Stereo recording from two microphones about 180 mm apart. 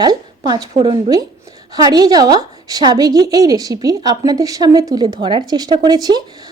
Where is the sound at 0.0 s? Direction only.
25° right (ahead or behind).